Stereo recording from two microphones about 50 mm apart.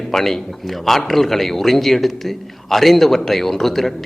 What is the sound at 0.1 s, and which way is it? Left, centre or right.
A man's voice, centre.